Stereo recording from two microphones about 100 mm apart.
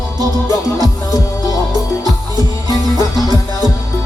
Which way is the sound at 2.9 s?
40° right (ahead or behind).